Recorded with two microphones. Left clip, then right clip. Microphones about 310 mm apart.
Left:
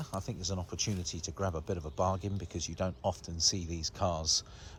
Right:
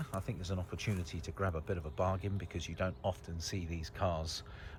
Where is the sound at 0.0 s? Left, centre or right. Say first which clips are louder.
Left 4 dB; centre.